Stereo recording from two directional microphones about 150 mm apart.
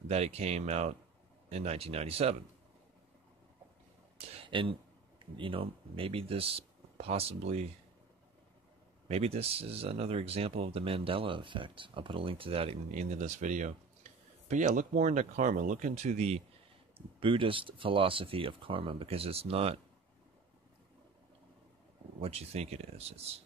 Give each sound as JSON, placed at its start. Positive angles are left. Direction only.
{"t": 0.1, "sound": "speech", "side_deg": -45}
{"t": 4.3, "sound": "a sound", "side_deg": -35}
{"t": 5.4, "sound": "speech", "side_deg": -35}
{"t": 9.0, "sound": "speech", "side_deg": -45}
{"t": 12.9, "sound": "speech", "side_deg": -55}
{"t": 22.2, "sound": "speech", "side_deg": -45}